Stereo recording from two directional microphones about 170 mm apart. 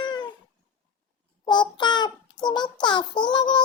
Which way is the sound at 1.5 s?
25° left (ahead or behind).